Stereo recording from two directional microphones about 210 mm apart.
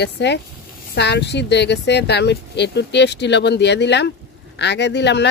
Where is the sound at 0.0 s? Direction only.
55° left (ahead or behind).